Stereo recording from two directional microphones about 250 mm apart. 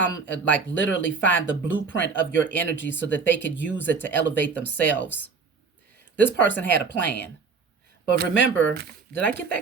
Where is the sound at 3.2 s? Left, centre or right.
Left.